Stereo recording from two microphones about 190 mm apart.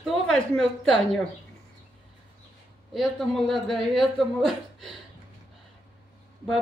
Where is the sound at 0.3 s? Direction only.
5° left (ahead or behind).